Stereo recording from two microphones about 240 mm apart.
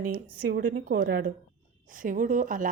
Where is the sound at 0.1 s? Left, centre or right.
Right.